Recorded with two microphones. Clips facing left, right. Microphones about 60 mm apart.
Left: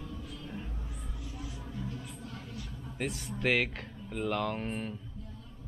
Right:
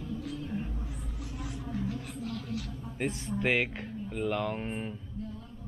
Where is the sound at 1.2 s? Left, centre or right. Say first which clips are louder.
Right 5 dB; right.